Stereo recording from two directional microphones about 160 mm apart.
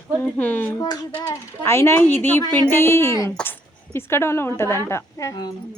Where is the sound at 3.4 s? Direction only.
15° left (ahead or behind).